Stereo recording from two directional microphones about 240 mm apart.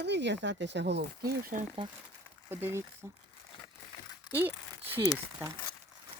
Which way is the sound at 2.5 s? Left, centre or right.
Centre.